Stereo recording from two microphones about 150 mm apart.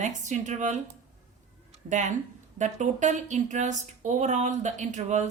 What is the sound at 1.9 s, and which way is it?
Speech, 55° right (ahead or behind).